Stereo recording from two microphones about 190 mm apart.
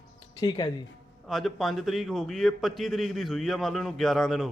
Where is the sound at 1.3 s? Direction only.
Centre (ahead or behind).